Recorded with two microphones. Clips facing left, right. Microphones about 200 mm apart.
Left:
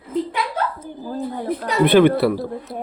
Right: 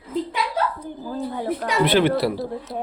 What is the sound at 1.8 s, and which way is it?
Speech, 55° left (ahead or behind).